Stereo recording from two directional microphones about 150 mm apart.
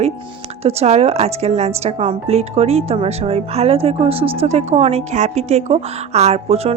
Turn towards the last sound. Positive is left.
turn(degrees=-45)  # may be behind; listen again after turning